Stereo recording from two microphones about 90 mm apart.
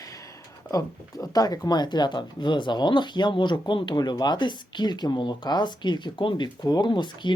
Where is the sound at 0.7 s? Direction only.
45° left (ahead or behind).